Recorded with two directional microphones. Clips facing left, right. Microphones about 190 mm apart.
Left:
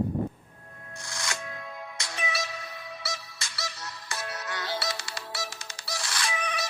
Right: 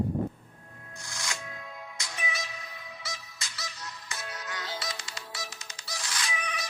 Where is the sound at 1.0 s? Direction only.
75° left (ahead or behind).